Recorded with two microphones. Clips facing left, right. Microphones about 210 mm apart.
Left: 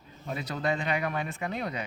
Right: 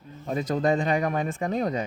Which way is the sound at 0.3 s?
45° right (ahead or behind).